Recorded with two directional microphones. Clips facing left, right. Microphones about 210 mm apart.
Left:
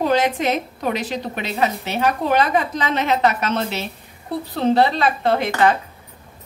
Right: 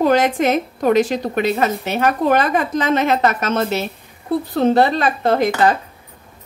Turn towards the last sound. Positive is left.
turn(degrees=-40)  # may be behind; listen again after turning